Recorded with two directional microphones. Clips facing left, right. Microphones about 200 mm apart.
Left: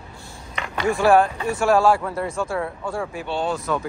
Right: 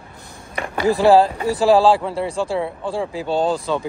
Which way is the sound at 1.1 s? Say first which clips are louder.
Right 3 dB; 35° right (ahead or behind).